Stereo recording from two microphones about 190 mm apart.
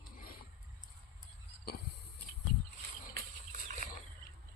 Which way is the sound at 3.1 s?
45° right (ahead or behind).